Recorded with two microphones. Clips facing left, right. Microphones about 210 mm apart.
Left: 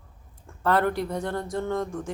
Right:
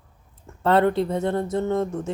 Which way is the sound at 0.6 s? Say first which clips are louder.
Right 5 dB; 25° right (ahead or behind).